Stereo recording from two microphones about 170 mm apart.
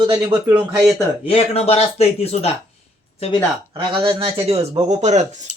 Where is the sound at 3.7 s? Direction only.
30° right (ahead or behind).